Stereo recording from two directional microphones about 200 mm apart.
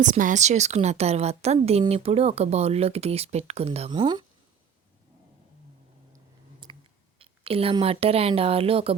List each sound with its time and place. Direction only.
0.0 s a woman's voice: 40° right (ahead or behind); by 4.3 s 25° right (ahead or behind)
6.1 s a sound: 25° right (ahead or behind)
7.2 s speech: 30° right (ahead or behind)